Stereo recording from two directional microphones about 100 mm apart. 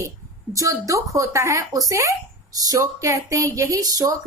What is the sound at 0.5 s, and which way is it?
Speech, 35° right (ahead or behind).